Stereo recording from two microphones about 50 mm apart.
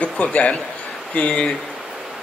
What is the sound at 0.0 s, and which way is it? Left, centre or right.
A man's voice, left.